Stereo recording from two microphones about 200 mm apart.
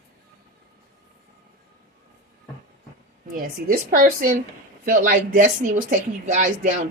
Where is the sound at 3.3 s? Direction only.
45° right (ahead or behind).